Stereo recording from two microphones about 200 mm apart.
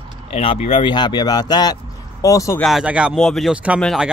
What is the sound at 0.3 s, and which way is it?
Speech, 30° left (ahead or behind).